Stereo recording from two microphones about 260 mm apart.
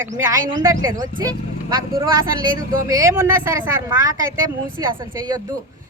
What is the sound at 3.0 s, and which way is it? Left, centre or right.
Speech, centre.